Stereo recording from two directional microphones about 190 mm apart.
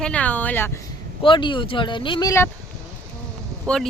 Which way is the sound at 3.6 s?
5° left (ahead or behind).